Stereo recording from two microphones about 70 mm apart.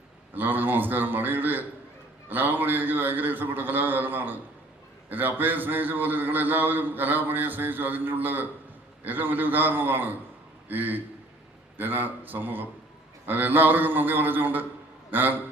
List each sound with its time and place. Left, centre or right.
0.3 s a man's voice: right